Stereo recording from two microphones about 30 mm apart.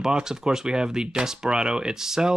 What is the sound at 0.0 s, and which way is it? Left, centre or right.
Speech, right.